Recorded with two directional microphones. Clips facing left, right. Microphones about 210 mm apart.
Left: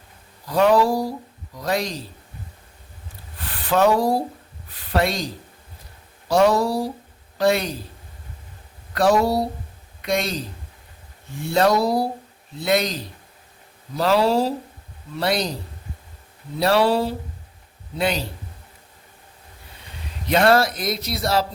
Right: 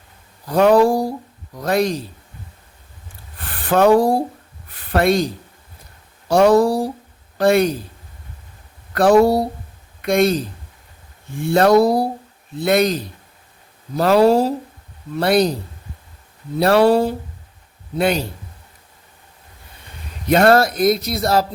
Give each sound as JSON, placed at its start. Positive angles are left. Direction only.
{"t": 0.4, "sound": "speech", "side_deg": -50}
{"t": 3.7, "sound": "speech", "side_deg": -50}
{"t": 9.0, "sound": "speech", "side_deg": -50}
{"t": 16.6, "sound": "speech", "side_deg": -50}
{"t": 20.2, "sound": "speech", "side_deg": -50}